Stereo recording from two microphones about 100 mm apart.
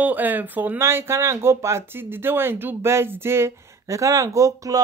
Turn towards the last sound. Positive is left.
turn(degrees=-35)  # may be behind; listen again after turning